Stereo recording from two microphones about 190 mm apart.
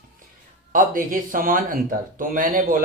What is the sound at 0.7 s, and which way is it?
A man's voice, 45° right (ahead or behind).